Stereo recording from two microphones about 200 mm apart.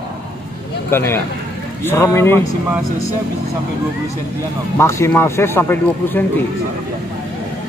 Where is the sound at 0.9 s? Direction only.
10° left (ahead or behind).